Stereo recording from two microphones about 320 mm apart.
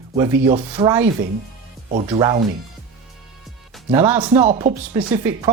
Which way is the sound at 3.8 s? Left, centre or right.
Centre.